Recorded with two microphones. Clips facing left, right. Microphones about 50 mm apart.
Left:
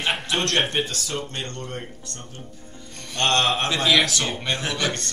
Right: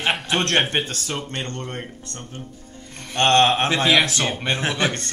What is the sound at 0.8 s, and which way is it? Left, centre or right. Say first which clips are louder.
Speech: right 1 dB; right.